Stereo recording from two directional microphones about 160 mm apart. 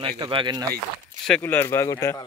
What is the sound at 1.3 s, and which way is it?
Speech, 10° left (ahead or behind).